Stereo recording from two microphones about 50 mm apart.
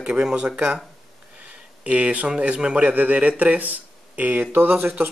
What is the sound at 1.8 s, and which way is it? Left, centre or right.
Speech, right.